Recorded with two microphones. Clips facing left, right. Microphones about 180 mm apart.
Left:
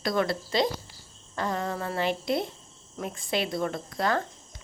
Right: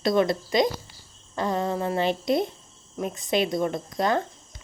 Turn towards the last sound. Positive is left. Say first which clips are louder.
# right 3 dB
turn(degrees=-20)  # may be behind; listen again after turning